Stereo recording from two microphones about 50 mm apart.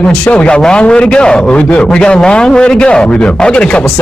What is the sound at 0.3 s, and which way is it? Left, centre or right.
A man's voice, left.